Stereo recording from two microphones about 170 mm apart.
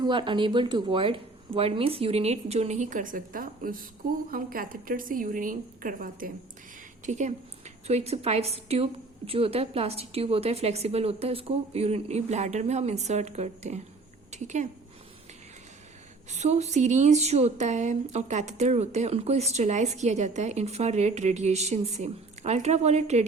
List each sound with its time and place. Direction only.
0.0 s a woman's voice: 30° right (ahead or behind)
16.3 s speech: 40° right (ahead or behind)